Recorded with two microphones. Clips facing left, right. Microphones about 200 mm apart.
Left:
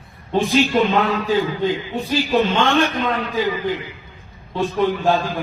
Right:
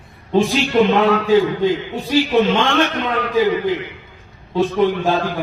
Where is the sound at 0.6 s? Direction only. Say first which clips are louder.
Right 4 dB; 70° right (ahead or behind).